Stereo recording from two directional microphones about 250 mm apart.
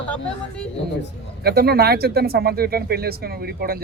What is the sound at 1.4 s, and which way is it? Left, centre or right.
Speech, right.